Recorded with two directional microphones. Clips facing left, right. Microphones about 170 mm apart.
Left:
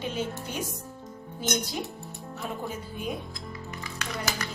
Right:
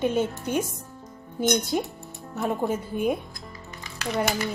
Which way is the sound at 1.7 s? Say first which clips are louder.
Right 8 dB; 50° right (ahead or behind).